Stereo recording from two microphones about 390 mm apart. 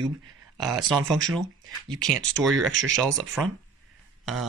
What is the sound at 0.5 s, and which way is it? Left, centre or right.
Speech, centre.